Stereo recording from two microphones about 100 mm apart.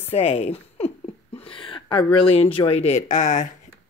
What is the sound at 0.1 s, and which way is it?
Speech, 90° left.